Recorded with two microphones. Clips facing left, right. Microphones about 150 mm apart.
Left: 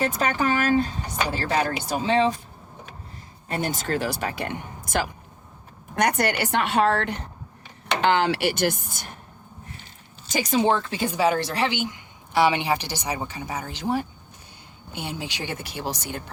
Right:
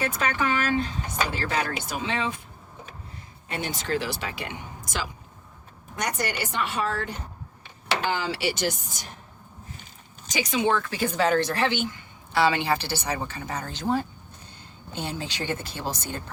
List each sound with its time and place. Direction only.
0.0 s speech: 40° left (ahead or behind)
3.5 s a woman's voice: 45° left (ahead or behind)
10.3 s speech: 40° left (ahead or behind); by 11.1 s 20° left (ahead or behind)
11.2 s a woman's voice: 10° left (ahead or behind)